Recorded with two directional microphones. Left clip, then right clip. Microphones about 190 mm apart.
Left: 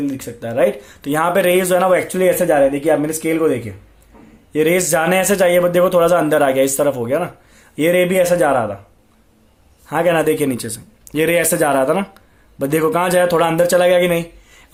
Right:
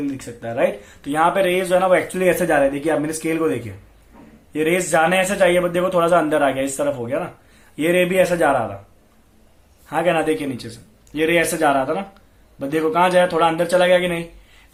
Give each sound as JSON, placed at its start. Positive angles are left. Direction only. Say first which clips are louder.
{"t": 0.0, "sound": "a man's voice", "louder": "left 3 dB", "side_deg": 35}
{"t": 9.8, "sound": "a man's voice", "louder": "left 4 dB", "side_deg": 40}